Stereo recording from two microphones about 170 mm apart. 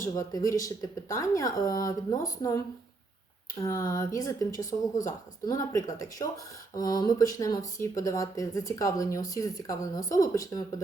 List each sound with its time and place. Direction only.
0.0 s speech: 20° left (ahead or behind)